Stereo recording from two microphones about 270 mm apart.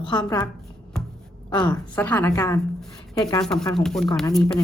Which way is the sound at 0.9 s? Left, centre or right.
Centre.